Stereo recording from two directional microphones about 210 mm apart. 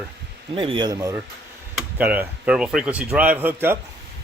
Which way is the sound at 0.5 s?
25° right (ahead or behind).